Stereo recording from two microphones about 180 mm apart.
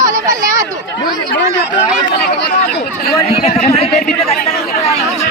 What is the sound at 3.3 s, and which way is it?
Speech, 35° left (ahead or behind).